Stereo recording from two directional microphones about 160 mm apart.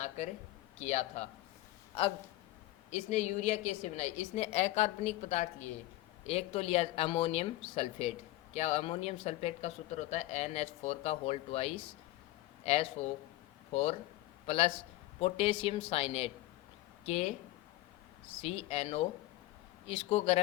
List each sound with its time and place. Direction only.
0.8 s a woman's voice: 45° left (ahead or behind)
2.9 s a woman's voice: 45° left (ahead or behind)
14.4 s a man's voice: 40° left (ahead or behind)
18.4 s speech: 40° left (ahead or behind)